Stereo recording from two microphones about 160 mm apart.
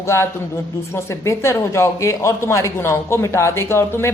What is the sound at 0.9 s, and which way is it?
A woman's voice, 15° left (ahead or behind).